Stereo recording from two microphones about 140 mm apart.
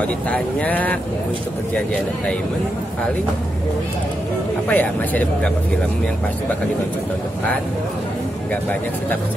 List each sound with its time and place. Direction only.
0.0 s speech: 10° left (ahead or behind)
4.6 s speech: 10° left (ahead or behind)